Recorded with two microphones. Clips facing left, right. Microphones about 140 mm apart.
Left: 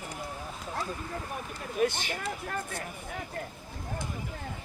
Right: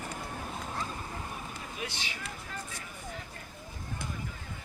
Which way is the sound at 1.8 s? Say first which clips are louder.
Left 14 dB; 50° left (ahead or behind).